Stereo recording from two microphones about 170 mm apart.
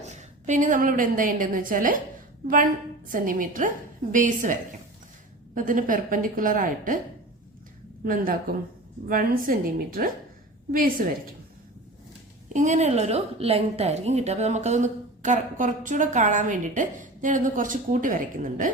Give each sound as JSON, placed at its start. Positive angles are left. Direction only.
{"t": 0.0, "sound": "a woman's voice", "side_deg": -45}
{"t": 3.1, "sound": "a woman's voice", "side_deg": -55}
{"t": 5.5, "sound": "a woman's voice", "side_deg": -50}
{"t": 8.0, "sound": "a woman's voice", "side_deg": -55}
{"t": 12.5, "sound": "a woman's voice", "side_deg": -45}